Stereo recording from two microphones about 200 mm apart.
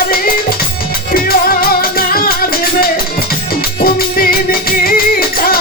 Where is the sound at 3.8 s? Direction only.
50° left (ahead or behind).